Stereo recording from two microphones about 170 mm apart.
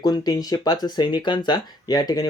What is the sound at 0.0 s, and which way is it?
Speech, 25° left (ahead or behind).